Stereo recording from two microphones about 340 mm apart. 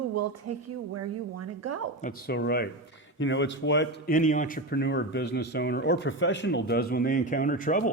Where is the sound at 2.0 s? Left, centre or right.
Left.